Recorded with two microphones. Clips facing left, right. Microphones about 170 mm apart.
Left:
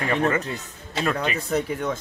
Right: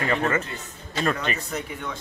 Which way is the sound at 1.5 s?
40° left (ahead or behind).